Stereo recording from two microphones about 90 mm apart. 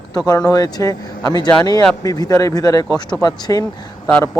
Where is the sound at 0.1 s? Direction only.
45° left (ahead or behind).